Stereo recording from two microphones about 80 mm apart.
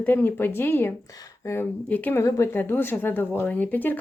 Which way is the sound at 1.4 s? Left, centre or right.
Left.